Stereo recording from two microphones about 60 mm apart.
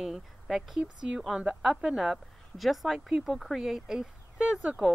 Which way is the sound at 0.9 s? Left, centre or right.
Centre.